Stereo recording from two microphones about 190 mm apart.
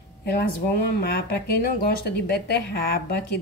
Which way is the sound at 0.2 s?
60° left (ahead or behind).